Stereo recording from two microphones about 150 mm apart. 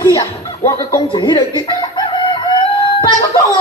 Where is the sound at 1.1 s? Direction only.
30° left (ahead or behind).